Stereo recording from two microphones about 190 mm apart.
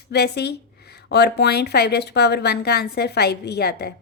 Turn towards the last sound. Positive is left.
turn(degrees=60)  # may be behind; listen again after turning